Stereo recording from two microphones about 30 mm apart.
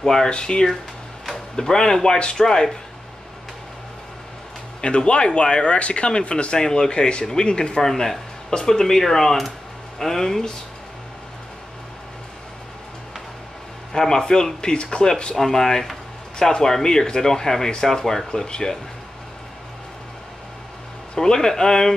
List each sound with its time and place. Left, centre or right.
0.0 s speech: centre
0.3 s speech: left
4.8 s speech: left
7.8 s speech: centre
13.9 s speech: left
15.3 s speech: centre
21.1 s speech: left